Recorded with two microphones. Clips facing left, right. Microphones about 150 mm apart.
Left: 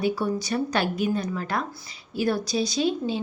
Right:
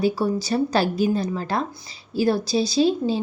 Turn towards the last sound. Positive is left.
turn(degrees=-30)  # may be behind; listen again after turning